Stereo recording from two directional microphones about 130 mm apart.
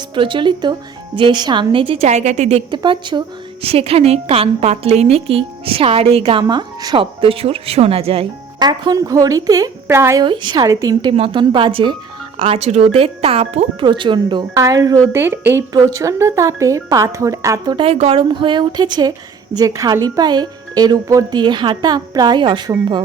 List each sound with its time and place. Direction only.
0.1 s speech: 40° right (ahead or behind)
2.0 s a woman's voice: 60° right (ahead or behind)
2.6 s a woman's voice: 40° right (ahead or behind)
8.5 s speech: 35° right (ahead or behind)
10.2 s speech: 35° right (ahead or behind)
11.2 s speech: 40° right (ahead or behind)
12.4 s a woman's voice: 50° right (ahead or behind)
13.8 s speech: 40° right (ahead or behind)
14.5 s speech: 25° right (ahead or behind)
17.7 s speech: 50° right (ahead or behind)